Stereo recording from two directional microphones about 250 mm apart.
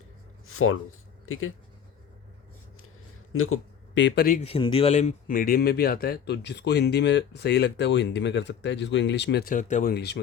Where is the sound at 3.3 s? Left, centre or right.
Left.